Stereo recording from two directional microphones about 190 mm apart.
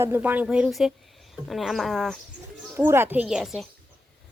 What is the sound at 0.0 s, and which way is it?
Speech, 10° right (ahead or behind).